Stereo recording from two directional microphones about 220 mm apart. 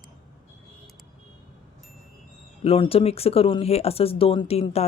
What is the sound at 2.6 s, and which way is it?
Speech, 25° left (ahead or behind).